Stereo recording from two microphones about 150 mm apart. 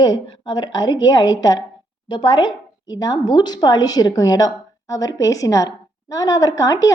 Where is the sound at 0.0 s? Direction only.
30° left (ahead or behind).